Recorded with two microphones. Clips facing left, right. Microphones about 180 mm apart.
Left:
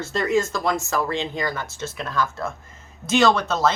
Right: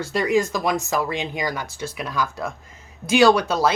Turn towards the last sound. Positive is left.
turn(degrees=-10)  # may be behind; listen again after turning